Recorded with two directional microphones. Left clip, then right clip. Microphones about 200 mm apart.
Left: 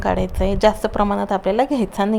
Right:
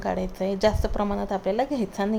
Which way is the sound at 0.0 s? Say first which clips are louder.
Left 7 dB; 20° left (ahead or behind).